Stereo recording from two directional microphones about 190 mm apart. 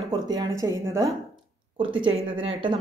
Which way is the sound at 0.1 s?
20° right (ahead or behind).